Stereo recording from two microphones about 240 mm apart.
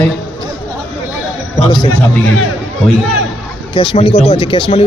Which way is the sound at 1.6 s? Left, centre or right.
Centre.